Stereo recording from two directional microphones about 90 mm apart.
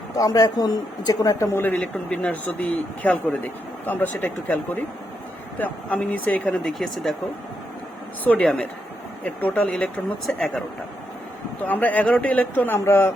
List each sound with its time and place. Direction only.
0.2 s a man's voice: 45° left (ahead or behind)
1.5 s speech: 20° left (ahead or behind); by 7.2 s 5° left (ahead or behind)
8.2 s speech: 15° left (ahead or behind)
11.6 s speech: 20° left (ahead or behind)